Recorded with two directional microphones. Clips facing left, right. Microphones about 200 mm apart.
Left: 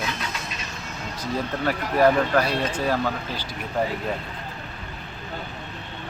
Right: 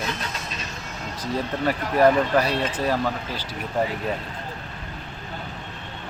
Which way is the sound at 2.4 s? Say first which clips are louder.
Even; 10° left (ahead or behind).